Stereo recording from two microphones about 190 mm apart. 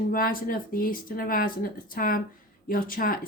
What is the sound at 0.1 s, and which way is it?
Speech, 50° left (ahead or behind).